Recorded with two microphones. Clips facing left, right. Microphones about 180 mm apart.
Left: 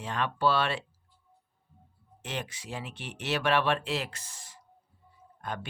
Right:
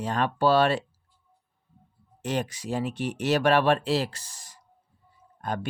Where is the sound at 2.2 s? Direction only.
40° right (ahead or behind).